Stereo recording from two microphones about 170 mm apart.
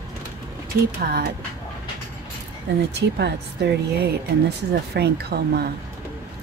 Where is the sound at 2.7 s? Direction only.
90° right.